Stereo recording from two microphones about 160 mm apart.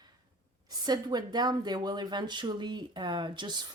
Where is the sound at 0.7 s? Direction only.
25° right (ahead or behind).